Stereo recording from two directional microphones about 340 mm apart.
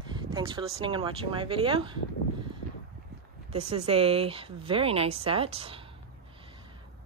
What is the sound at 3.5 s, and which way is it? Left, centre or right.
Speech, centre.